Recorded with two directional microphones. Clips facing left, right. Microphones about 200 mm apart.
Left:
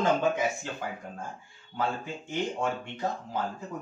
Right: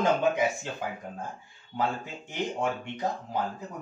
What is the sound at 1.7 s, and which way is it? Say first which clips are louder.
Speech: right 1 dB; 20° right (ahead or behind).